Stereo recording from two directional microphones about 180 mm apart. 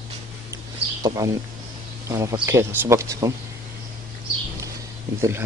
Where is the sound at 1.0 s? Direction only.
20° right (ahead or behind).